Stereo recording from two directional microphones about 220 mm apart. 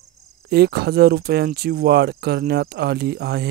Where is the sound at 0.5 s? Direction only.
50° right (ahead or behind).